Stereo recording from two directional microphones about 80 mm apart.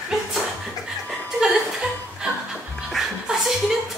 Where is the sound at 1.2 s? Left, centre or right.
Centre.